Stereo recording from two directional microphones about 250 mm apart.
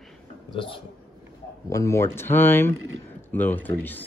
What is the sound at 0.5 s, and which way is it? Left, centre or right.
A man's voice, centre.